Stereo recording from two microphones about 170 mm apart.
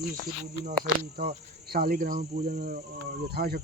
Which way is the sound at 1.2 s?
60° right (ahead or behind).